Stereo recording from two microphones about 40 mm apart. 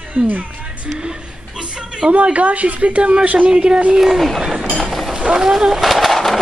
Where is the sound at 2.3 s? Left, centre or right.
Right.